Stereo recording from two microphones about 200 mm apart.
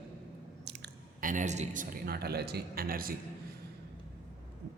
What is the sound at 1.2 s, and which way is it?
Speech, 40° right (ahead or behind).